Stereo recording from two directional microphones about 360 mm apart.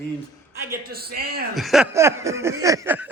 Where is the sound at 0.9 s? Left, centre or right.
Right.